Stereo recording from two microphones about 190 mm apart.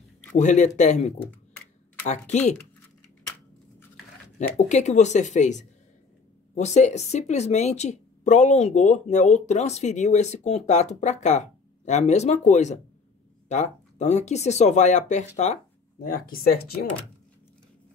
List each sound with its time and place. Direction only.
0.4 s speech: 40° left (ahead or behind)
4.4 s speech: 40° left (ahead or behind)